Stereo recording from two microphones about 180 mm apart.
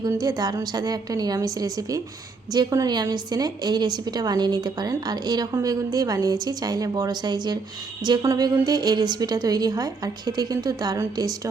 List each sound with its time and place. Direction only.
0.0 s a woman's voice: 20° right (ahead or behind)